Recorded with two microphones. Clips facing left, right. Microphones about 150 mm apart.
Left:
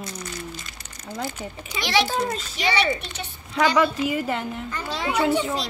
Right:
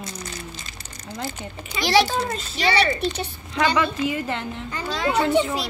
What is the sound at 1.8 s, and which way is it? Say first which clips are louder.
Speech: right 4 dB; 35° right (ahead or behind).